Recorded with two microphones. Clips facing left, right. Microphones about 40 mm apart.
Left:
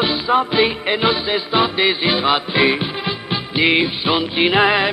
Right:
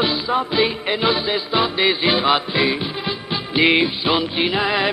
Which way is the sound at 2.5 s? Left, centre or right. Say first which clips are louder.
Left 3 dB; centre.